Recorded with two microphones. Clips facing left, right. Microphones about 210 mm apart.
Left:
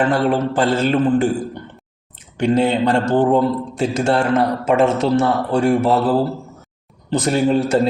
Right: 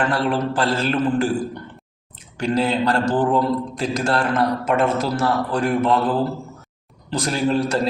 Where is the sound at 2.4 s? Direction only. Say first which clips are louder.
Left 4 dB; 25° left (ahead or behind).